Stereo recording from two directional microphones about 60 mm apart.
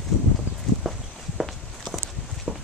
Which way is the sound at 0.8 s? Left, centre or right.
Centre.